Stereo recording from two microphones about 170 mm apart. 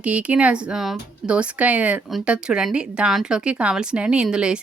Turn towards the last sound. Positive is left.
turn(degrees=-5)  # may be behind; listen again after turning